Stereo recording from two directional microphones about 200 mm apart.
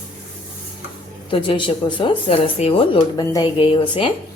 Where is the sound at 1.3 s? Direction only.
25° left (ahead or behind).